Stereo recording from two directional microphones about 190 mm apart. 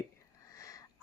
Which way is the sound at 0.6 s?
15° left (ahead or behind).